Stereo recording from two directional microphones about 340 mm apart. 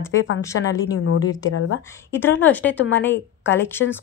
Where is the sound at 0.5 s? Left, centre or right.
Left.